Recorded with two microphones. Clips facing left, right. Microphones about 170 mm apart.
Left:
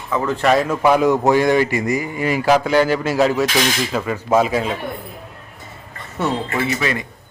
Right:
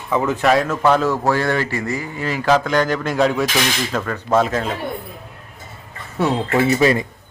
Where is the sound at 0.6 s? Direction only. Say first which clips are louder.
Left 2 dB; 10° left (ahead or behind).